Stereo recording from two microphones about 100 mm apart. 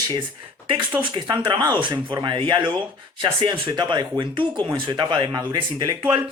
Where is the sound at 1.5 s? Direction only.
45° right (ahead or behind).